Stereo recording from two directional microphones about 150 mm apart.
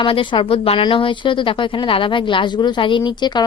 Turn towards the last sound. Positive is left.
turn(degrees=30)  # may be behind; listen again after turning